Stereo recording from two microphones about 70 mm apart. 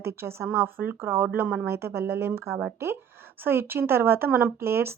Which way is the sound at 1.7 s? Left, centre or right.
Right.